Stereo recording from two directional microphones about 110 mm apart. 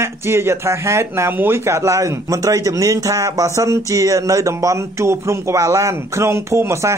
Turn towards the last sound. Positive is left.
turn(degrees=-25)  # may be behind; listen again after turning